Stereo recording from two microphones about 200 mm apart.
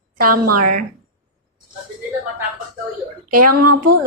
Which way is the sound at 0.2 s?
45° right (ahead or behind).